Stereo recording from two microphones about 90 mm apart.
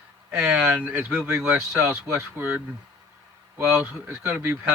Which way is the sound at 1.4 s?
10° right (ahead or behind).